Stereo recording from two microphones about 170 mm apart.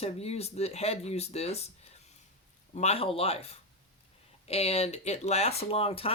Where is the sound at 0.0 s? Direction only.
35° left (ahead or behind).